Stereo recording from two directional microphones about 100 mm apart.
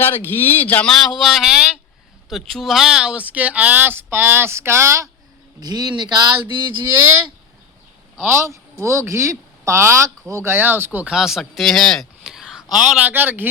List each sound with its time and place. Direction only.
0.0 s speech: 20° left (ahead or behind); by 5.0 s 25° right (ahead or behind)
5.5 s speech: 45° right (ahead or behind)
8.3 s speech: 30° right (ahead or behind)
11.1 s speech: 5° right (ahead or behind)